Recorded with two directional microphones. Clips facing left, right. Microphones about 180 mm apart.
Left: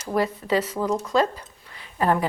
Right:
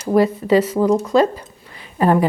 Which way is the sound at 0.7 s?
30° right (ahead or behind).